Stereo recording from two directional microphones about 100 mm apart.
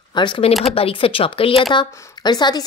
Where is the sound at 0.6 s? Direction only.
75° left (ahead or behind).